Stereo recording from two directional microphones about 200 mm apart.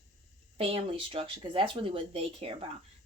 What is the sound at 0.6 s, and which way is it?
Speech, 30° right (ahead or behind).